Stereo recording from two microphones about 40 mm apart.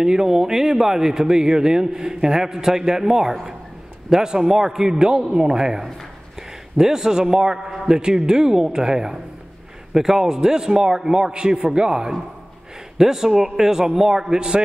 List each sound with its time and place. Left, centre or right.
0.0 s a man's voice: centre
12.9 s speech: centre